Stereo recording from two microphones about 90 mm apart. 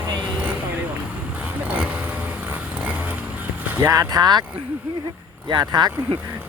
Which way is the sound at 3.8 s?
40° right (ahead or behind).